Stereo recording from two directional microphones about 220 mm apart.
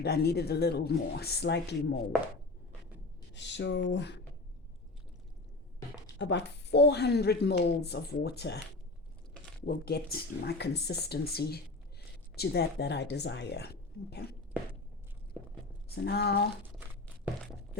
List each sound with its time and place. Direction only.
0.0 s speech: 45° left (ahead or behind)
3.3 s speech: 50° left (ahead or behind)
6.1 s speech: 55° left (ahead or behind)
9.6 s speech: 45° left (ahead or behind)
16.0 s speech: 45° left (ahead or behind)